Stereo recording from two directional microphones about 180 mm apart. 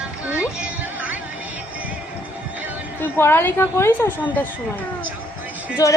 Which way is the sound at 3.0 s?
10° left (ahead or behind).